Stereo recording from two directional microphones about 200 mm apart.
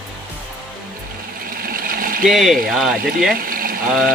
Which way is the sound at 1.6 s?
45° right (ahead or behind).